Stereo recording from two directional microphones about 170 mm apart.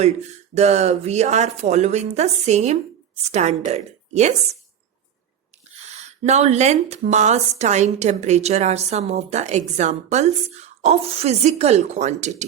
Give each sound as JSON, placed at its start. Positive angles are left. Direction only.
{"t": 0.0, "sound": "a woman's voice", "side_deg": -40}
{"t": 5.8, "sound": "a woman's voice", "side_deg": -40}